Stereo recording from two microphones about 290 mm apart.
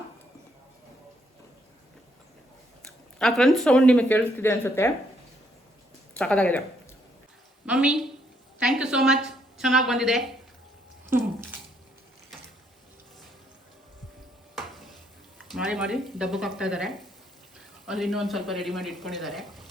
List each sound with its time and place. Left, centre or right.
2.8 s speech: centre
6.1 s speech: centre
7.7 s a woman's voice: centre
11.1 s a sound: centre
15.4 s speech: centre